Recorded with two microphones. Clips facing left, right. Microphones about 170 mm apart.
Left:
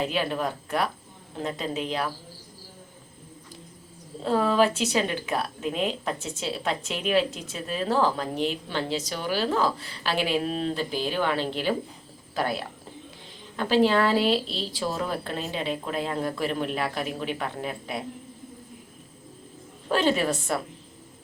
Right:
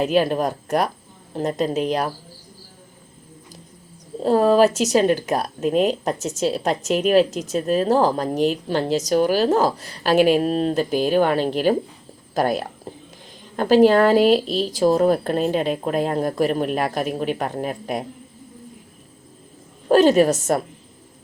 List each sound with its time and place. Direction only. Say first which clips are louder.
0.0 s speech: right 8 dB; 40° right (ahead or behind)
4.2 s speech: right 7 dB; 40° right (ahead or behind)
19.9 s speech: right 9 dB; 40° right (ahead or behind)